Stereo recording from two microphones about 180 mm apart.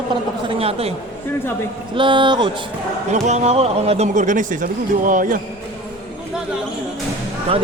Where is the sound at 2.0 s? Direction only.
25° right (ahead or behind).